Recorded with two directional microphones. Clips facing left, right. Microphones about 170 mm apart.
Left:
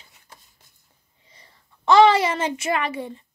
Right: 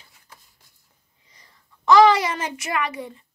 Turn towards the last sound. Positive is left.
turn(degrees=30)  # may be behind; listen again after turning